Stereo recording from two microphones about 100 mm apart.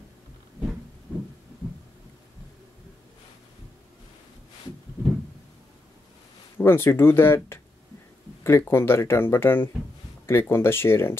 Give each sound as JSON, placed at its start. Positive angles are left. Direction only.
{"t": 6.6, "sound": "speech", "side_deg": 25}